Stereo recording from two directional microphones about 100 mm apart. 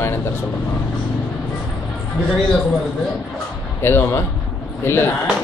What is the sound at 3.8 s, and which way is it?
A man's voice, 25° left (ahead or behind).